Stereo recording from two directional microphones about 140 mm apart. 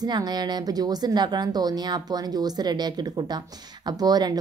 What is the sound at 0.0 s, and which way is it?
Speech, 30° right (ahead or behind).